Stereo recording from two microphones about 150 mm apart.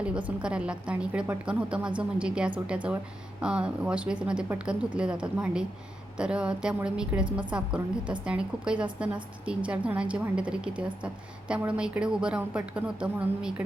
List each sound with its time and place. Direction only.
0.3 s a woman's voice: 5° right (ahead or behind)